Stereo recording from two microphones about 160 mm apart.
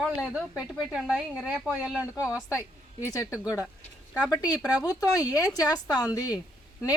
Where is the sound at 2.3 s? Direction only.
20° left (ahead or behind).